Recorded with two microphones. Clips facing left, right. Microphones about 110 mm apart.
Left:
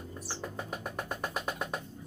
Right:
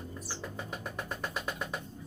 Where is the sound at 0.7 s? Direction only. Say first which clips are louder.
Left 1 dB; 45° left (ahead or behind).